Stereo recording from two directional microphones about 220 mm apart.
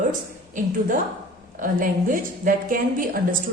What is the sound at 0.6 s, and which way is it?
A woman's voice, 35° right (ahead or behind).